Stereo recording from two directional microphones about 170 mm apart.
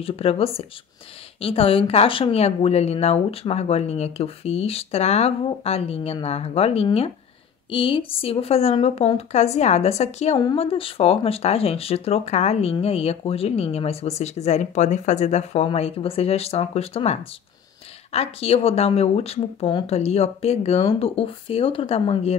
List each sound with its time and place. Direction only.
0.0 s speech: 35° left (ahead or behind)